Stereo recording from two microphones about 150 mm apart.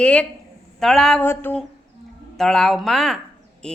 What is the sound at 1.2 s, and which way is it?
Speech, 15° left (ahead or behind).